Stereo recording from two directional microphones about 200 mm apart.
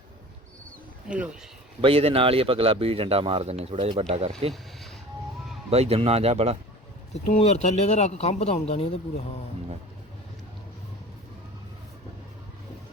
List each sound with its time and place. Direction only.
1.0 s speech: 5° right (ahead or behind)
1.8 s speech: 30° right (ahead or behind)
5.7 s speech: 30° right (ahead or behind)
7.1 s speech: 30° left (ahead or behind)